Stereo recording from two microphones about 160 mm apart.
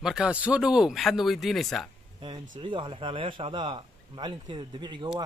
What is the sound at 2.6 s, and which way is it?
A man's voice, 30° right (ahead or behind).